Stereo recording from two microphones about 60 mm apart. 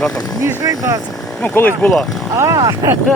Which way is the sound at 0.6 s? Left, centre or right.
Right.